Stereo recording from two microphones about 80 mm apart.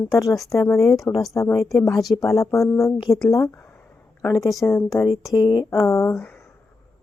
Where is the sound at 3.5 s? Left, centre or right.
Left.